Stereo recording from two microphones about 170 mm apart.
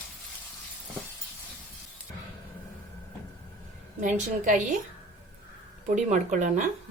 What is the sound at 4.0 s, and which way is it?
Speech, 50° right (ahead or behind).